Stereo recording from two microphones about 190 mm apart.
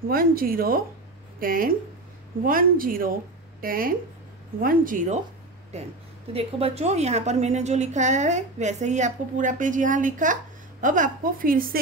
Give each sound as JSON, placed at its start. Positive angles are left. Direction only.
{"t": 0.1, "sound": "a woman's voice", "side_deg": -50}